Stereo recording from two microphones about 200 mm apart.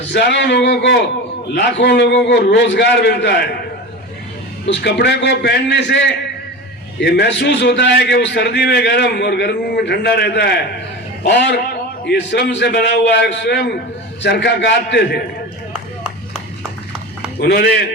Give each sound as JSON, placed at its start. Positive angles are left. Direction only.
{"t": 0.1, "sound": "a man's voice", "side_deg": 60}
{"t": 4.6, "sound": "a man's voice", "side_deg": 60}
{"t": 17.4, "sound": "a man's voice", "side_deg": 60}